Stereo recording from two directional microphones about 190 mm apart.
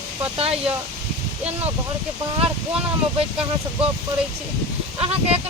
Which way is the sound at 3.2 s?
30° right (ahead or behind).